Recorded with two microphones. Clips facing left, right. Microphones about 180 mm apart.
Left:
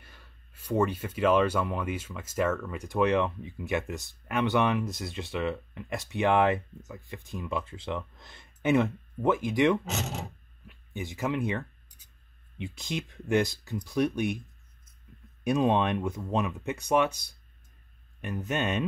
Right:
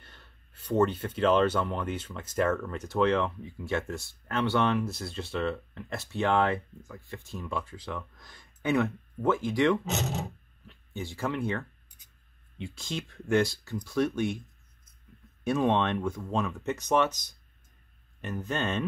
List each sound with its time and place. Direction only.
0.0 s speech: 10° left (ahead or behind)
15.4 s speech: 15° left (ahead or behind)
18.5 s speech: 15° left (ahead or behind)